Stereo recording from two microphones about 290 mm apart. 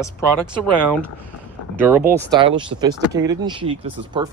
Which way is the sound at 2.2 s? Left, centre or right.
Centre.